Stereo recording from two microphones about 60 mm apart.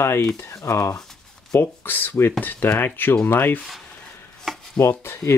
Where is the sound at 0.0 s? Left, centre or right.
Left.